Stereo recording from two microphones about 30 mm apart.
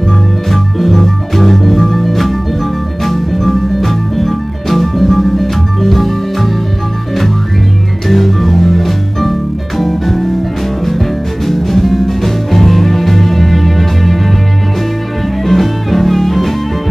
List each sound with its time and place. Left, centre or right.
0.5 s music: centre
8.1 s music: centre
11.4 s music: centre
15.4 s music: centre